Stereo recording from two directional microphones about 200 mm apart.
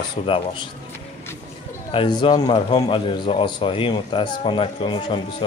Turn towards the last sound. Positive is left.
turn(degrees=25)  # may be behind; listen again after turning